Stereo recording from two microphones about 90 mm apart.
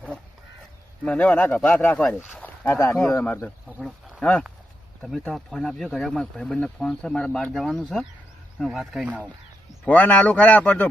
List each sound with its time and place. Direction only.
1.0 s speech: 15° left (ahead or behind)
1.6 s speech: 5° left (ahead or behind)
1.9 s speech: 15° left (ahead or behind)
4.2 s speech: 10° left (ahead or behind)
9.8 s speech: 20° left (ahead or behind)